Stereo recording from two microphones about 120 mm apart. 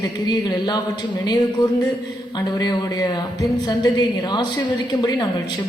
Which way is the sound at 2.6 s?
35° left (ahead or behind).